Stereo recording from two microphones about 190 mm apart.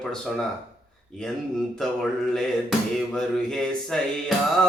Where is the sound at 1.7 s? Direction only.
Centre (ahead or behind).